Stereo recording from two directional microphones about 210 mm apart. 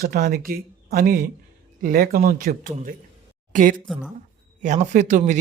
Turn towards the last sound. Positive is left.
turn(degrees=-35)  # may be behind; listen again after turning